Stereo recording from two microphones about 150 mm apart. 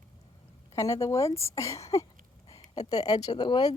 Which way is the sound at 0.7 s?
20° left (ahead or behind).